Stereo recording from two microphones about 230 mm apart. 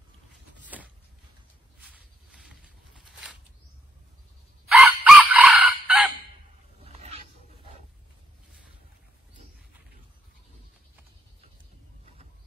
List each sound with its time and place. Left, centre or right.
0.6 s a sound: centre
4.6 s chicken: centre
6.8 s wild animals: right